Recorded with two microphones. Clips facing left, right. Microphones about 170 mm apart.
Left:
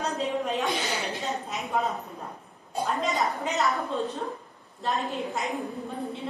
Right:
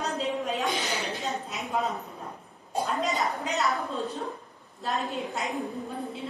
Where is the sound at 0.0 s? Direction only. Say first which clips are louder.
Left 1 dB; centre (ahead or behind).